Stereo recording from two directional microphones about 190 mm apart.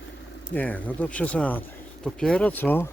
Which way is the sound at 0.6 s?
10° left (ahead or behind).